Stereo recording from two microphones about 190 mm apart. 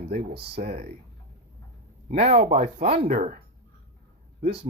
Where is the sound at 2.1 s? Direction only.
35° right (ahead or behind).